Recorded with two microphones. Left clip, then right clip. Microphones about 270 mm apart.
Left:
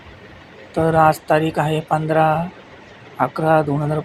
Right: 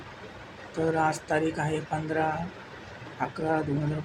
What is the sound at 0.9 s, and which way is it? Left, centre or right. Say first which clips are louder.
Speech: left 14 dB; left.